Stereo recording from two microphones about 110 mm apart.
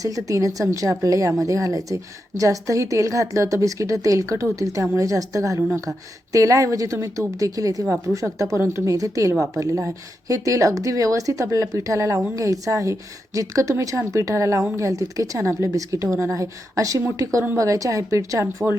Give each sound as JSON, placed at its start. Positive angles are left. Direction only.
{"t": 0.0, "sound": "a woman's voice", "side_deg": -30}